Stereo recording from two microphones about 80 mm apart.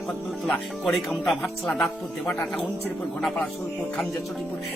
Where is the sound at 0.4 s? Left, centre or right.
Centre.